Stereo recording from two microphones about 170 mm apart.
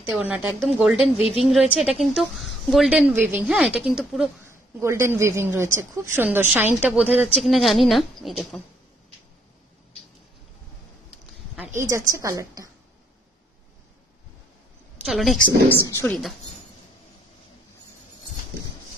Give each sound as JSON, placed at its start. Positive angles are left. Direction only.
{"t": 0.0, "sound": "a woman's voice", "side_deg": -10}
{"t": 4.5, "sound": "a woman's voice", "side_deg": -15}
{"t": 11.8, "sound": "a woman's voice", "side_deg": -20}
{"t": 15.0, "sound": "a woman's voice", "side_deg": 0}
{"t": 15.7, "sound": "speech", "side_deg": 15}
{"t": 16.1, "sound": "a woman's voice", "side_deg": 0}